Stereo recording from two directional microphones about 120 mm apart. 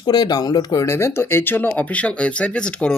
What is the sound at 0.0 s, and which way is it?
Speech, 35° left (ahead or behind).